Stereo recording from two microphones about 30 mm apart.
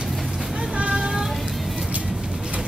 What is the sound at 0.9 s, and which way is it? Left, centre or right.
Child singing, centre.